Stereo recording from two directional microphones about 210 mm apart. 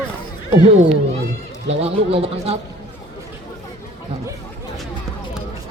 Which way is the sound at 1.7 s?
30° right (ahead or behind).